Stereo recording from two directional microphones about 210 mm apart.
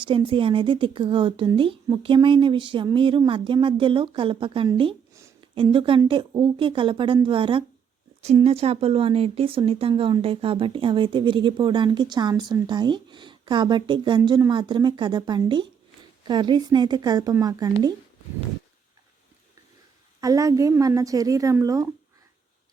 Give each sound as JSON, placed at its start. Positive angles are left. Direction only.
{"t": 0.0, "sound": "speech", "side_deg": -25}
{"t": 20.2, "sound": "a woman's voice", "side_deg": -15}